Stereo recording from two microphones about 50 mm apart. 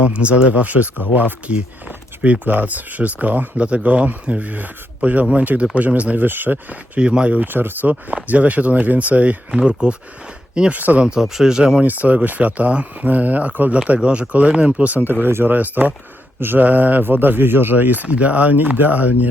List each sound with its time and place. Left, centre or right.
0.0 s speech: right
6.2 s speech: right
7.0 s speech: right
7.4 s speech: right
10.5 s speech: right
10.8 s speech: right
11.0 s speech: centre
11.8 s speech: right
15.5 s speech: right
16.6 s speech: right